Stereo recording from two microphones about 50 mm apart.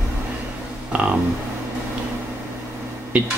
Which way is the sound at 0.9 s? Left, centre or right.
Right.